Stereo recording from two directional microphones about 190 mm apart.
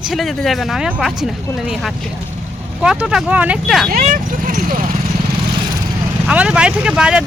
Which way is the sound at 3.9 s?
45° right (ahead or behind).